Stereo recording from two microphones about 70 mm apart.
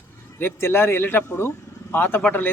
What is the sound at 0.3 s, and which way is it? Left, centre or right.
Speech, left.